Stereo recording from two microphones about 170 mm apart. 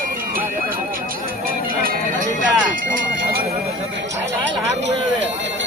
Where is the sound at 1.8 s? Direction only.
55° right (ahead or behind).